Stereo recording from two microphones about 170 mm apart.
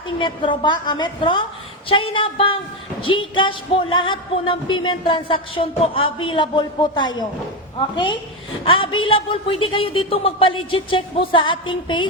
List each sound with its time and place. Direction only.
0.2 s music: 30° left (ahead or behind)
1.9 s a woman's voice: 30° left (ahead or behind)
3.0 s music: 30° left (ahead or behind)
8.6 s a woman's voice: 30° left (ahead or behind)